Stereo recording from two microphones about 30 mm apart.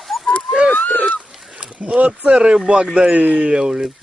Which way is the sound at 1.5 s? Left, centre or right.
Right.